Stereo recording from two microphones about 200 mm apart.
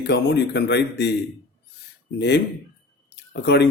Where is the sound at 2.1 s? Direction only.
60° left (ahead or behind).